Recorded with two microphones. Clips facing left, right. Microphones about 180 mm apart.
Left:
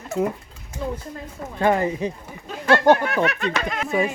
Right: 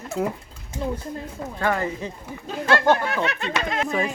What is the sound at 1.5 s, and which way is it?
Speech, 20° left (ahead or behind).